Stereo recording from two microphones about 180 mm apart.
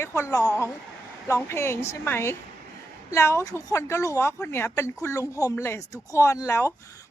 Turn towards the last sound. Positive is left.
turn(degrees=15)  # may be behind; listen again after turning